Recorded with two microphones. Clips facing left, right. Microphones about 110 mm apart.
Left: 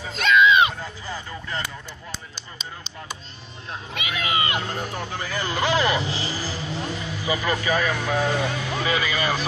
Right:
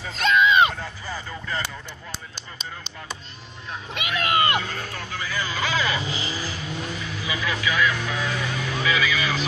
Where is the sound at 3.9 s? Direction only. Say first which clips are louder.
Right 3 dB; 70° right (ahead or behind).